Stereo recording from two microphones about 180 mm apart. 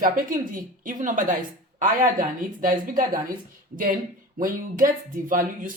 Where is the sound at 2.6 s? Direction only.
50° right (ahead or behind).